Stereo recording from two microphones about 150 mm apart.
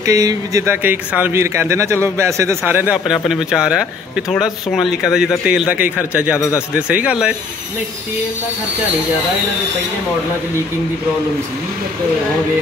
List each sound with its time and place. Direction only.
0.0 s a man's voice: 25° right (ahead or behind); by 6.3 s 10° right (ahead or behind)
6.3 s speech: 20° left (ahead or behind)
6.7 s a man's voice: 10° right (ahead or behind)